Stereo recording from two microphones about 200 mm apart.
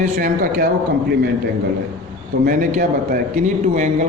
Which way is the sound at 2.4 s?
40° right (ahead or behind).